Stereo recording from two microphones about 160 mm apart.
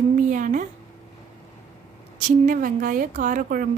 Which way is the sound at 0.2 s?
55° right (ahead or behind).